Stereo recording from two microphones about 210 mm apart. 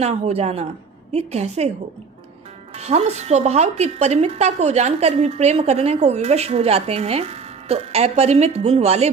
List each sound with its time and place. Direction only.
0.0 s speech: 30° right (ahead or behind)
2.7 s speech: 30° right (ahead or behind)